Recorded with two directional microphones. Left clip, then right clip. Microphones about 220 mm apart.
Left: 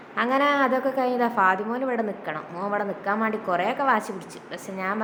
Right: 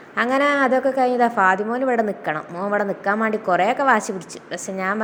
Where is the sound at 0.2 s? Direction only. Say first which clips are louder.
Right 3 dB; 20° right (ahead or behind).